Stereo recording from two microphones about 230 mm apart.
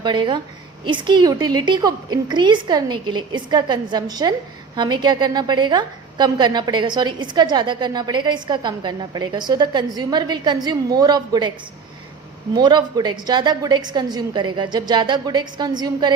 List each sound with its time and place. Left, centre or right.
0.0 s a woman's voice: centre
12.5 s a woman's voice: centre